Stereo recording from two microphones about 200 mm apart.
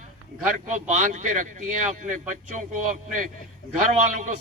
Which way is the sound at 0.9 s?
40° right (ahead or behind).